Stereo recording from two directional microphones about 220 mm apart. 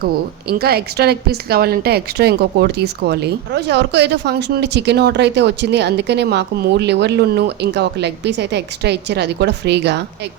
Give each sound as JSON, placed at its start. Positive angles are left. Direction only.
{"t": 0.0, "sound": "a woman's voice", "side_deg": -45}